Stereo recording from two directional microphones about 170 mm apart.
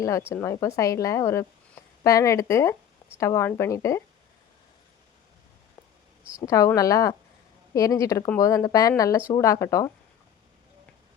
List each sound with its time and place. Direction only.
0.0 s speech: 15° left (ahead or behind)
6.4 s speech: 20° left (ahead or behind)